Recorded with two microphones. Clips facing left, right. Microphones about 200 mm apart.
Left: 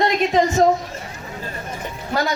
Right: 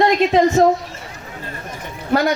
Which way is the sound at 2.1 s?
60° right (ahead or behind).